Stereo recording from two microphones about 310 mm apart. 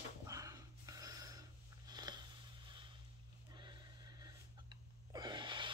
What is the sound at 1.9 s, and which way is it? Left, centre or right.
Biting, centre.